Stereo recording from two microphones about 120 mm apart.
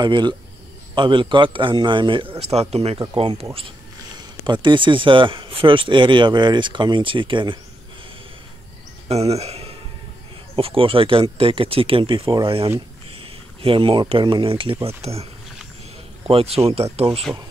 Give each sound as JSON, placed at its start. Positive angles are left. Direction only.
{"t": 0.0, "sound": "speech", "side_deg": -40}
{"t": 4.5, "sound": "speech", "side_deg": -45}
{"t": 9.1, "sound": "speech", "side_deg": -60}
{"t": 16.3, "sound": "speech", "side_deg": -55}